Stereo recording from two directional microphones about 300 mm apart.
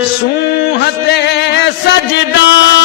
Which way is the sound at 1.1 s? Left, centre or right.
Left.